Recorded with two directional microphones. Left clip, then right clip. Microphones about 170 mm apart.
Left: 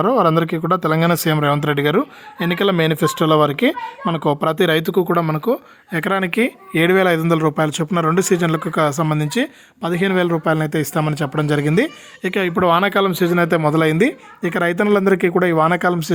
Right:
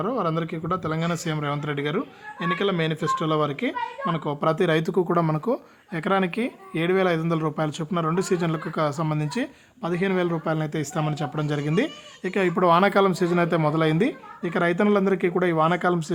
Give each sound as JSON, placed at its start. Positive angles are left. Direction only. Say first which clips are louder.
{"t": 0.0, "sound": "speech", "louder": "left 11 dB", "side_deg": 50}
{"t": 5.9, "sound": "a man's voice", "louder": "left 5 dB", "side_deg": 30}